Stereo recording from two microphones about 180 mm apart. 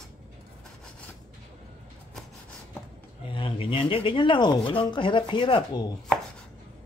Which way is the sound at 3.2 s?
30° left (ahead or behind).